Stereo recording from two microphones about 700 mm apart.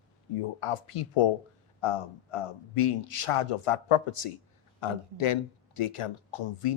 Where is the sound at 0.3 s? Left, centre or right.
Left.